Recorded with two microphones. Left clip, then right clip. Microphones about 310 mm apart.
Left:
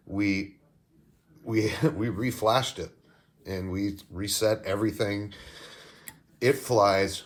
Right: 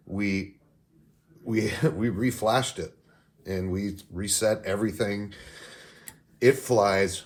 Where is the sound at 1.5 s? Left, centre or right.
Centre.